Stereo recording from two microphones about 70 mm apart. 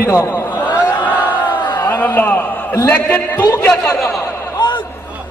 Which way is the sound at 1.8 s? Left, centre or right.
Left.